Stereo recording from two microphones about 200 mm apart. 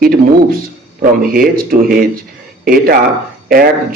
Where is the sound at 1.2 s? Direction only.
45° right (ahead or behind).